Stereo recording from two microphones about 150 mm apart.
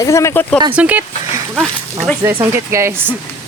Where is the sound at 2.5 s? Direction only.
15° right (ahead or behind).